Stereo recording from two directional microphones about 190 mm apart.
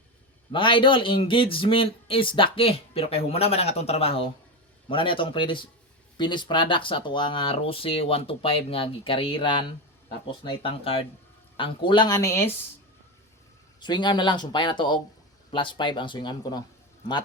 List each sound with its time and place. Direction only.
0.5 s speech: 25° left (ahead or behind)
13.7 s speech: 25° left (ahead or behind)